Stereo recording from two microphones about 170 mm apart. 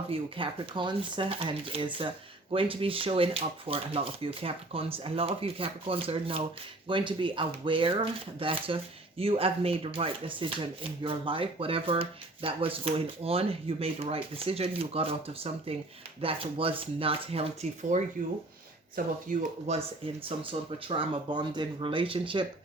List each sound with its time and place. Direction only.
0.1 s speech: 30° right (ahead or behind)
18.9 s speech: 50° right (ahead or behind)
20.2 s speech: 30° right (ahead or behind)